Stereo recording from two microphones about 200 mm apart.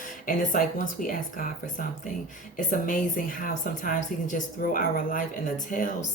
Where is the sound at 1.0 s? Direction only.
40° left (ahead or behind).